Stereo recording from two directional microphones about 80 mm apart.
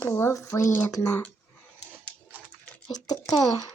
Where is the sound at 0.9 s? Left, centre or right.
Left.